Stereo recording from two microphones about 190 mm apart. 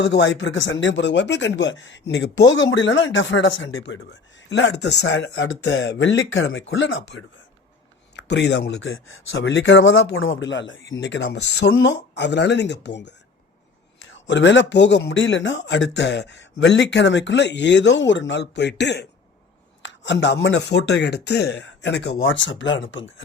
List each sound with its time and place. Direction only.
0.0 s speech: 65° left (ahead or behind); by 7.3 s 85° left
8.1 s speech: 65° left (ahead or behind)
14.3 s speech: 70° left (ahead or behind)